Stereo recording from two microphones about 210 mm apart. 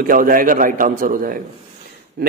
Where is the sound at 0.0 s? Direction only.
40° right (ahead or behind).